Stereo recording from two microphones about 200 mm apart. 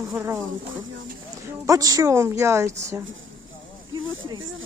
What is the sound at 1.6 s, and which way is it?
A man's voice, 15° right (ahead or behind).